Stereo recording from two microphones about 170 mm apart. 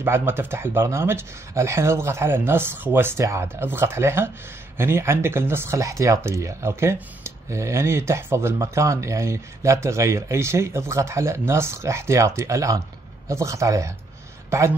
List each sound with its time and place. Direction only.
0.0 s speech: 15° right (ahead or behind)